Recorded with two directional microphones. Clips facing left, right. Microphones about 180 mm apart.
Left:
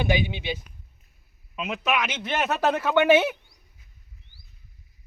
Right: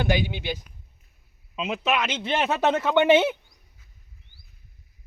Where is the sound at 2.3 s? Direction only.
Centre (ahead or behind).